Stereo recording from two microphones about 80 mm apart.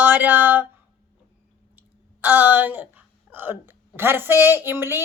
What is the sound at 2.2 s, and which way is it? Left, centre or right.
Speech, right.